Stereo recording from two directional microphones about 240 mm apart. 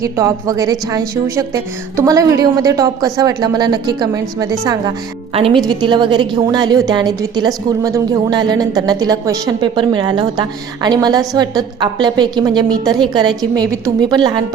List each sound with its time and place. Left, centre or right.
0.0 s a woman's voice: centre